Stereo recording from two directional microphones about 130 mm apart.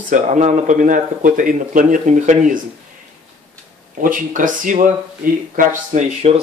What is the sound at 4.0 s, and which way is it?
Speech, 90° right.